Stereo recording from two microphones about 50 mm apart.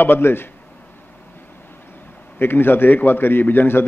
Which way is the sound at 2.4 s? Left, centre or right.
Left.